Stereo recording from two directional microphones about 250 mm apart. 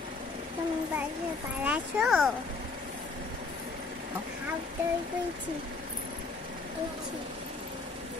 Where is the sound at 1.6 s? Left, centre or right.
Centre.